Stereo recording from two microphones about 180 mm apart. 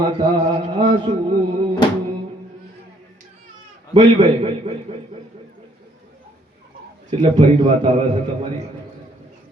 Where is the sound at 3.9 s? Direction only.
30° right (ahead or behind).